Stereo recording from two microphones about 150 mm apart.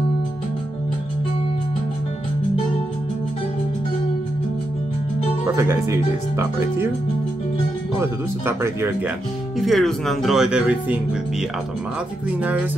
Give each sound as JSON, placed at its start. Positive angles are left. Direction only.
{"t": 5.6, "sound": "speech", "side_deg": -20}
{"t": 8.0, "sound": "speech", "side_deg": -15}
{"t": 9.6, "sound": "speech", "side_deg": 0}
{"t": 12.3, "sound": "speech", "side_deg": -10}